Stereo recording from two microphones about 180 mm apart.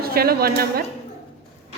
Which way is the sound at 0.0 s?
60° right (ahead or behind).